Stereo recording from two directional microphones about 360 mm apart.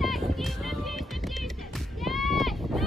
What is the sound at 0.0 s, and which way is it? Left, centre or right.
Music, centre.